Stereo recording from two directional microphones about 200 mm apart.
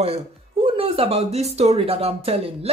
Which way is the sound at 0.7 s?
30° right (ahead or behind).